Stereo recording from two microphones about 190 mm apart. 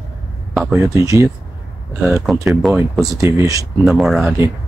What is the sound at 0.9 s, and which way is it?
Speech, 15° right (ahead or behind).